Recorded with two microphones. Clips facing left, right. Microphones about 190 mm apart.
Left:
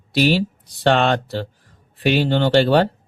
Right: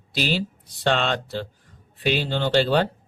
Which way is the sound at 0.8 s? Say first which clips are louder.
Left 6 dB; 55° left (ahead or behind).